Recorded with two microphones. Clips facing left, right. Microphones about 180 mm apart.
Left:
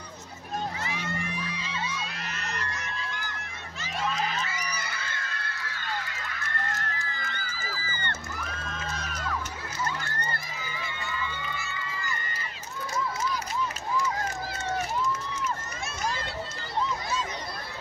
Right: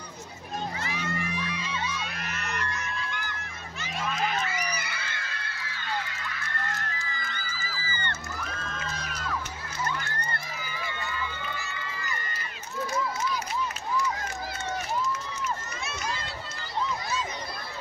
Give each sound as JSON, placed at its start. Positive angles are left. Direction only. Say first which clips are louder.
{"t": 1.1, "sound": "music", "louder": "right 2 dB", "side_deg": 30}
{"t": 2.1, "sound": "crowd", "louder": "right 2 dB", "side_deg": 30}
{"t": 4.8, "sound": "music", "louder": "left 1 dB", "side_deg": 45}
{"t": 7.0, "sound": "music", "louder": "left 1 dB", "side_deg": 55}
{"t": 15.8, "sound": "run", "louder": "left 2 dB", "side_deg": 45}